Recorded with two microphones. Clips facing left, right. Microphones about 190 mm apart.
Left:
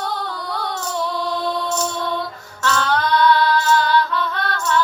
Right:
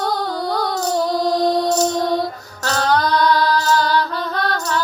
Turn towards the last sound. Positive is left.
turn(degrees=-40)  # may be behind; listen again after turning